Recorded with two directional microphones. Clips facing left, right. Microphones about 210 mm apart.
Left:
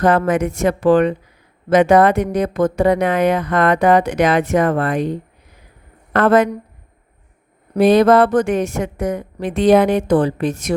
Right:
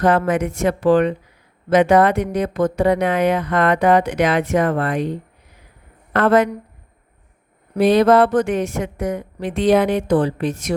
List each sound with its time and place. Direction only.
0.0 s speech: 45° left (ahead or behind)
6.1 s speech: 45° left (ahead or behind)
7.8 s speech: 45° left (ahead or behind)